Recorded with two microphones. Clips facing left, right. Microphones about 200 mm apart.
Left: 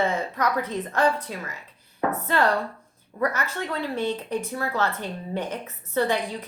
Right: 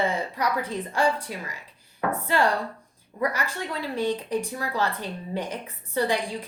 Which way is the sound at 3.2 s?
15° right (ahead or behind).